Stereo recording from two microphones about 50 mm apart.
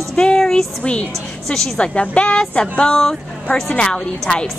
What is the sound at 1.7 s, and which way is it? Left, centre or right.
Speech, left.